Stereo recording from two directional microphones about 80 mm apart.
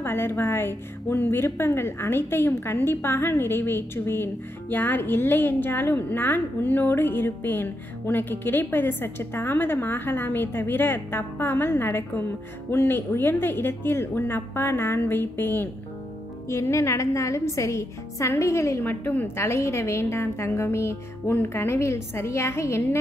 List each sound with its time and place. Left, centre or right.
0.0 s a woman's voice: left
16.4 s a woman's voice: left